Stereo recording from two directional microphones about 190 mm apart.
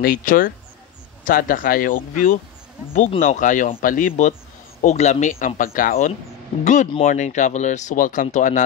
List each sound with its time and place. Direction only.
0.0 s speech: 50° left (ahead or behind)